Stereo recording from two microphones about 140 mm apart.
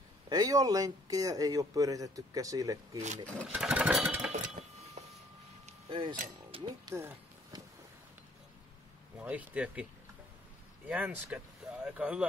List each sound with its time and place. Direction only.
0.3 s speech: 25° right (ahead or behind)
3.4 s jackhammer: 5° right (ahead or behind)
4.3 s a sound: 55° right (ahead or behind)
5.9 s speech: 35° right (ahead or behind)
6.5 s music: 45° right (ahead or behind)
6.9 s music: 25° right (ahead or behind)
9.2 s speech: 10° right (ahead or behind)
10.9 s speech: 10° right (ahead or behind)